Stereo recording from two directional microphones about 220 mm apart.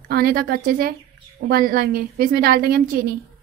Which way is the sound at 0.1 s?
40° right (ahead or behind).